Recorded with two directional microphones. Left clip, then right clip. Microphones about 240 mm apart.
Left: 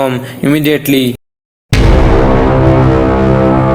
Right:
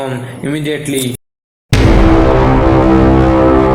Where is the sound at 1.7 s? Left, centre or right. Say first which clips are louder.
Even; centre.